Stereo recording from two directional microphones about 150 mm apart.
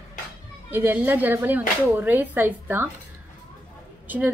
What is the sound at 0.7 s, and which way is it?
A woman's voice, 15° right (ahead or behind).